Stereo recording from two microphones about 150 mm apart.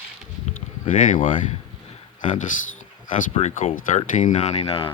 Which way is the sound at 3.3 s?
50° left (ahead or behind).